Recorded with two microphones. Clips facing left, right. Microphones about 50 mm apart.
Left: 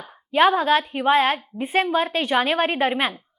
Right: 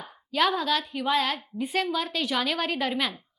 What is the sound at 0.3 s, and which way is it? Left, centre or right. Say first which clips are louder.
A woman's voice: left 7 dB; left.